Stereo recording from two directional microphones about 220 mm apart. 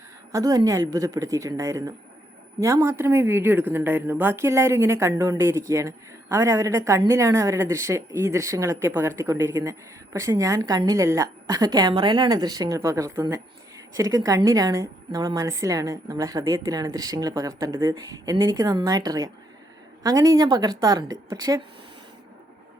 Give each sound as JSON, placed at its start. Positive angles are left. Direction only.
{"t": 0.3, "sound": "speech", "side_deg": -15}